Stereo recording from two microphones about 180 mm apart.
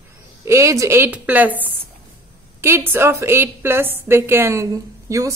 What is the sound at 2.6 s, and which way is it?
A woman's voice, 15° right (ahead or behind).